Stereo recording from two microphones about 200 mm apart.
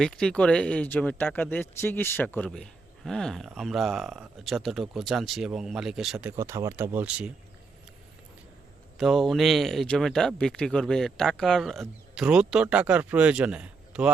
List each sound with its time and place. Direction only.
0.0 s speech: 5° left (ahead or behind)
6.3 s speech: 15° right (ahead or behind)
9.0 s speech: centre (ahead or behind)